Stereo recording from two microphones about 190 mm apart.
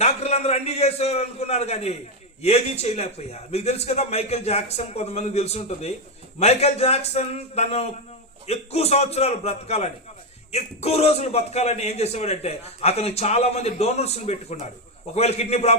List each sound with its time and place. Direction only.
0.0 s a man's voice: 35° left (ahead or behind)